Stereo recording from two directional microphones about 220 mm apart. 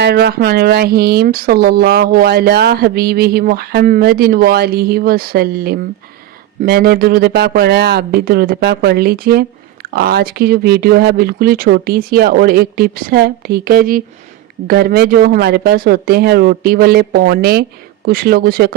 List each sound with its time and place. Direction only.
0.0 s speech: 45° right (ahead or behind)